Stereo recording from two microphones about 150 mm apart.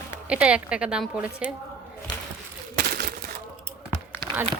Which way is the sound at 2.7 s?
90° right.